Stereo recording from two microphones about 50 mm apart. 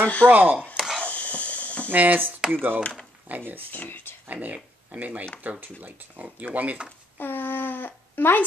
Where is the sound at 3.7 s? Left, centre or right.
Left.